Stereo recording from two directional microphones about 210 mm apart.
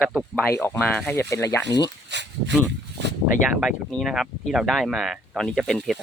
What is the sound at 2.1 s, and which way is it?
Speech, 55° right (ahead or behind).